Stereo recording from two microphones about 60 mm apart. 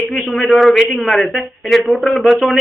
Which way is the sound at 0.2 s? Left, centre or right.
Centre.